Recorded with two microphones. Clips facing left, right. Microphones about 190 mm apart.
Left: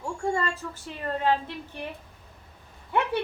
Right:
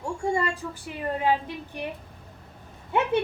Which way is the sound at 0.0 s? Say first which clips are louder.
Right 2 dB; 10° right (ahead or behind).